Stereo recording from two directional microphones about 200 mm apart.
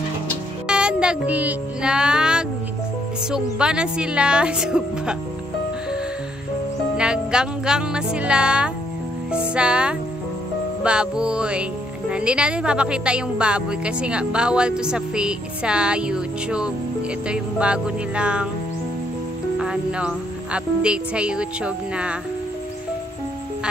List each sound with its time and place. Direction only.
0.7 s music: 5° right (ahead or behind)
3.3 s a woman's voice: 5° right (ahead or behind)
7.0 s music: 5° right (ahead or behind)
9.3 s a woman's voice: 5° right (ahead or behind)
19.6 s a woman's voice: 5° right (ahead or behind)